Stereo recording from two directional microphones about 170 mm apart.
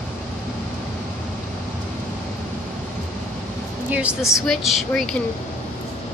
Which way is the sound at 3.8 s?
10° right (ahead or behind).